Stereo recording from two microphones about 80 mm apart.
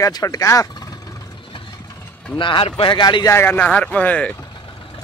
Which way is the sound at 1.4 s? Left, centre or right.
Left.